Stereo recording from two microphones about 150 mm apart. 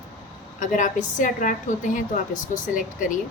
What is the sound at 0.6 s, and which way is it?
A woman's voice, 55° left (ahead or behind).